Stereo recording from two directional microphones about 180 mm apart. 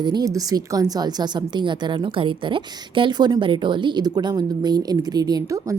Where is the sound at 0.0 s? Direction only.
25° right (ahead or behind).